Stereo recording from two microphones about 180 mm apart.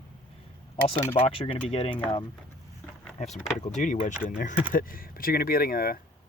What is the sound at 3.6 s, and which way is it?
Speech, 45° left (ahead or behind).